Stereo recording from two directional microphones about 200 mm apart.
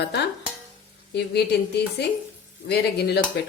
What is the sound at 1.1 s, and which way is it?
Speech, 55° left (ahead or behind).